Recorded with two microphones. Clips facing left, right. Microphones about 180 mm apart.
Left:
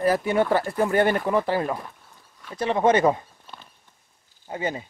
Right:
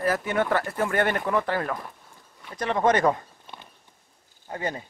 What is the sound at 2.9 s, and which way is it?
Speech, 25° left (ahead or behind).